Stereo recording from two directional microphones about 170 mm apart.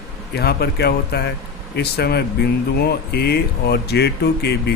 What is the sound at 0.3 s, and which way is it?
Speech, 70° left (ahead or behind).